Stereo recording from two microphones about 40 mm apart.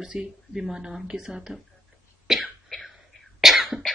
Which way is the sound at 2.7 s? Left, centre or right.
Centre.